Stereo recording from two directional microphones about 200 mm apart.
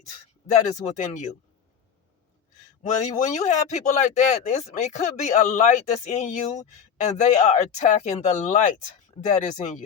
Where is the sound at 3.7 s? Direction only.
35° left (ahead or behind).